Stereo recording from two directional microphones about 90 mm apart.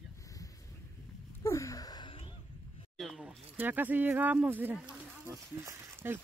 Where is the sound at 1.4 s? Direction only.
35° left (ahead or behind).